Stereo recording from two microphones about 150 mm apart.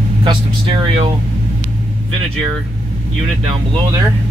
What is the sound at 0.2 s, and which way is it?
Speech, 30° right (ahead or behind).